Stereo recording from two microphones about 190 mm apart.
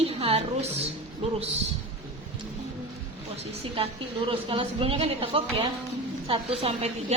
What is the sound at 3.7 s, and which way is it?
A woman's voice, 30° right (ahead or behind).